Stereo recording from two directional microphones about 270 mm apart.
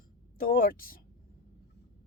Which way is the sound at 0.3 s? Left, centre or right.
Left.